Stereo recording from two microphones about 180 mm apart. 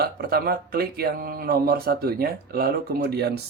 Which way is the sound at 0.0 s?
60° right (ahead or behind).